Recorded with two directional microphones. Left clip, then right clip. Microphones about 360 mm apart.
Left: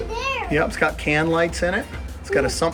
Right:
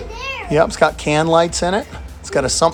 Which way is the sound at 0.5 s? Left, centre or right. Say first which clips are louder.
Right 8 dB; centre.